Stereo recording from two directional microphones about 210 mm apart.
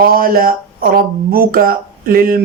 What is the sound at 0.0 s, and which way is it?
Speech, 45° right (ahead or behind).